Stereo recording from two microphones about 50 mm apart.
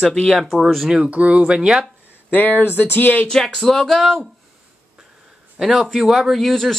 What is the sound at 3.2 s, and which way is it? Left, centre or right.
Speech, centre.